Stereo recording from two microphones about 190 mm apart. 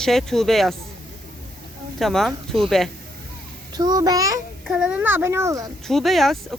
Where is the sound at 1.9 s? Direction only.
Centre (ahead or behind).